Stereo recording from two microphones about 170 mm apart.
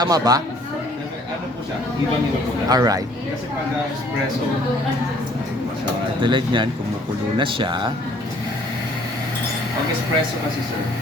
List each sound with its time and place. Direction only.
0.0 s speech: 20° right (ahead or behind)
2.6 s speech: 20° right (ahead or behind)
6.2 s speech: 30° right (ahead or behind)